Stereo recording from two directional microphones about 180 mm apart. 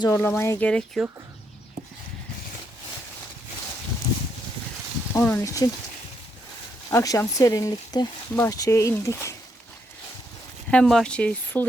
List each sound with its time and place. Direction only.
0.0 s speech: 15° left (ahead or behind)
5.1 s speech: 15° left (ahead or behind)
6.9 s speech: 15° left (ahead or behind)
10.7 s speech: 5° left (ahead or behind)